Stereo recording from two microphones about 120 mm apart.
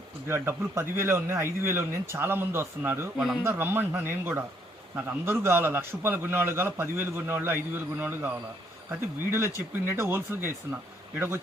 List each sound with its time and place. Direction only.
0.3 s a man's voice: 20° right (ahead or behind)